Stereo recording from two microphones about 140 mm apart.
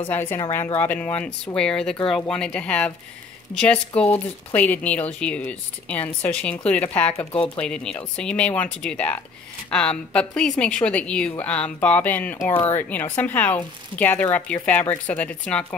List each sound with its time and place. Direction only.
0.1 s speech: 15° left (ahead or behind)